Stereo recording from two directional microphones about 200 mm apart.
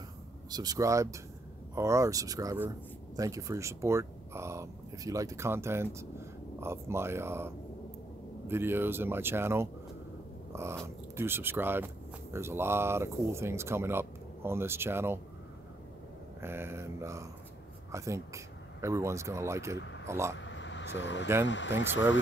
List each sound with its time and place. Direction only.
0.5 s speech: 20° right (ahead or behind)
10.5 s biting: 15° right (ahead or behind)
11.1 s speech: 10° right (ahead or behind)
16.3 s speech: 10° right (ahead or behind)
20.3 s a sound: 65° left (ahead or behind)
21.5 s speech: 65° left (ahead or behind)